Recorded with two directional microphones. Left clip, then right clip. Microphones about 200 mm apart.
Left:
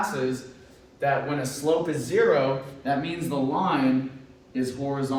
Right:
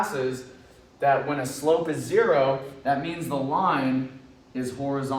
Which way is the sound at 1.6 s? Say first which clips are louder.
Right 2 dB; 25° right (ahead or behind).